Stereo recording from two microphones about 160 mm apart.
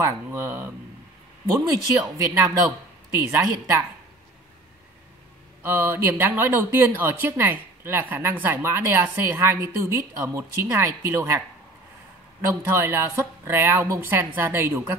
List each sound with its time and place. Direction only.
0.0 s speech: 15° right (ahead or behind)
5.6 s speech: 10° right (ahead or behind)